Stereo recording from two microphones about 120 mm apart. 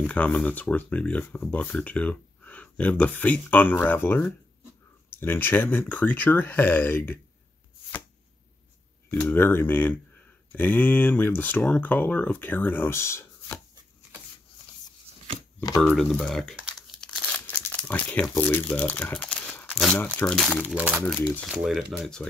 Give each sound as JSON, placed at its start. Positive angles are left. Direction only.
{"t": 0.0, "sound": "speech", "side_deg": 10}
{"t": 9.3, "sound": "speech", "side_deg": 20}
{"t": 15.8, "sound": "speech", "side_deg": 5}
{"t": 16.7, "sound": "crumpling", "side_deg": 5}
{"t": 18.3, "sound": "speech", "side_deg": 15}
{"t": 19.7, "sound": "crumpling", "side_deg": 0}
{"t": 20.3, "sound": "speech", "side_deg": 0}
{"t": 20.7, "sound": "speech", "side_deg": -10}